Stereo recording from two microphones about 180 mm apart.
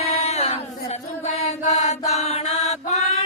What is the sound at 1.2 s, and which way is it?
Mantra, 40° left (ahead or behind).